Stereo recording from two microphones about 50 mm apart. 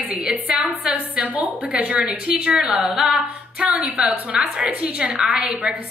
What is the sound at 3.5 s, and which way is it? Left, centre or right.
A woman's voice, right.